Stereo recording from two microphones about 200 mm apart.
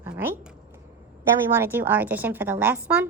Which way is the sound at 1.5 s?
10° right (ahead or behind).